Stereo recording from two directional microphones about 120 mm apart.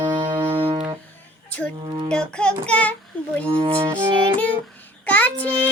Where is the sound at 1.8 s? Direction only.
40° right (ahead or behind).